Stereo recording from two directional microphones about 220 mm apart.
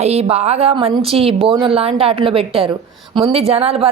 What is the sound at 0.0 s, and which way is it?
Speech, 30° right (ahead or behind).